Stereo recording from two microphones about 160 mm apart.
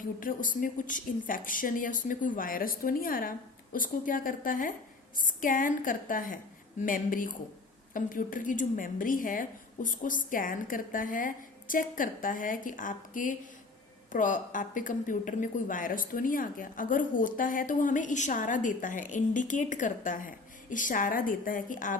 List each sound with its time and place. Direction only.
0.2 s speech: 60° left (ahead or behind)